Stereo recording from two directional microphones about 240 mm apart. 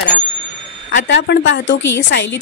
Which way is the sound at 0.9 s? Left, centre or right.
Left.